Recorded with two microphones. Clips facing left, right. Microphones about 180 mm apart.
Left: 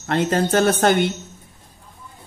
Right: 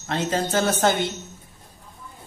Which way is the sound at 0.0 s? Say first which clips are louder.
Left 5 dB; 60° left (ahead or behind).